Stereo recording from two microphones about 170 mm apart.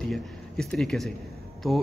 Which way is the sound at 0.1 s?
Centre (ahead or behind).